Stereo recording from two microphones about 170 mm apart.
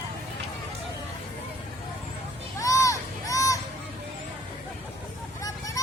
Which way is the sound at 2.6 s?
20° left (ahead or behind).